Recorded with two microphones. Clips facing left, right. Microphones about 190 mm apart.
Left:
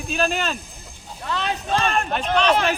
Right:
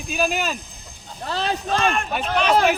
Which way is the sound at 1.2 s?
35° right (ahead or behind).